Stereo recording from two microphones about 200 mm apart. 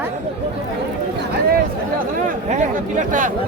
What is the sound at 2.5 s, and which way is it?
Speech, 35° right (ahead or behind).